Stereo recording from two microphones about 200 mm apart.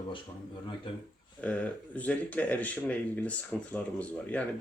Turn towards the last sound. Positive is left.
turn(degrees=5)  # may be behind; listen again after turning